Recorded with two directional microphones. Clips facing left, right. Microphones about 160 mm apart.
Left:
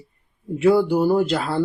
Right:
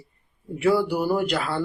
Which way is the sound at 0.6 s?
20° left (ahead or behind).